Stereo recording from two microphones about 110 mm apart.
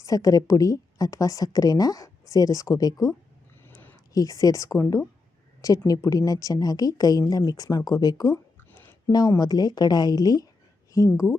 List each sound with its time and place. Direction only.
0.0 s speech: 30° left (ahead or behind)
4.1 s speech: 30° left (ahead or behind)
8.7 s a sound: 25° left (ahead or behind)
9.4 s speech: 35° left (ahead or behind)